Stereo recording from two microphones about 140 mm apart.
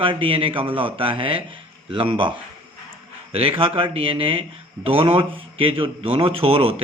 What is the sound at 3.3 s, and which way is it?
A man's voice, 40° right (ahead or behind).